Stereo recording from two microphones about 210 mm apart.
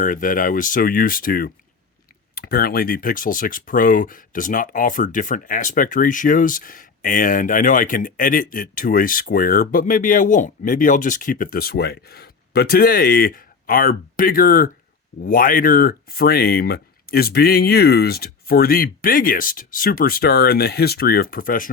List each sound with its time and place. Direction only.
0.0 s speech: 40° left (ahead or behind)